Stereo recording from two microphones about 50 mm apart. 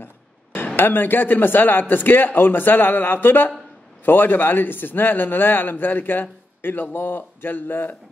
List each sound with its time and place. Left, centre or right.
0.7 s a man's voice: left